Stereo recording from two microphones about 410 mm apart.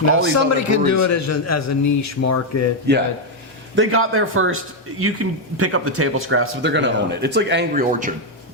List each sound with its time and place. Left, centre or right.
0.3 s a man's voice: left
2.9 s speech: right